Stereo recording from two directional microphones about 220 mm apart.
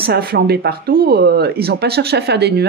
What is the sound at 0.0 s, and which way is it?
A woman's voice, 45° right (ahead or behind).